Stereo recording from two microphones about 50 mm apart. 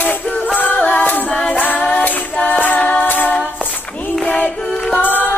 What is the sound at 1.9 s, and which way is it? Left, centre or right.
Music, left.